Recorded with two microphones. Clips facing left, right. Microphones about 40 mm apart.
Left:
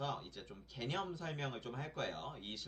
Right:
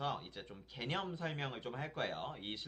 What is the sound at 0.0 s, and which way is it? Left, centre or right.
Speech, centre.